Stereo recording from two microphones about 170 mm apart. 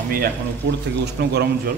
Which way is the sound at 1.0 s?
75° right (ahead or behind).